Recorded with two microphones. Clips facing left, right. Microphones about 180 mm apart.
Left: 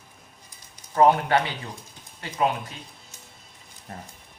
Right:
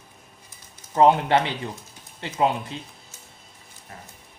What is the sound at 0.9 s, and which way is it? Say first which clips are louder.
Speech: right 1 dB; 20° right (ahead or behind).